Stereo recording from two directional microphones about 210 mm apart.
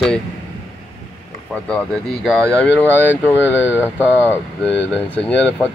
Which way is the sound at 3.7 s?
10° right (ahead or behind).